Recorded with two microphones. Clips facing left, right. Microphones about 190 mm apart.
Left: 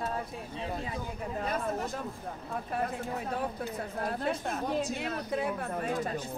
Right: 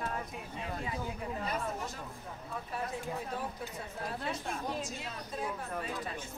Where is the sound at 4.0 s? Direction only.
55° left (ahead or behind).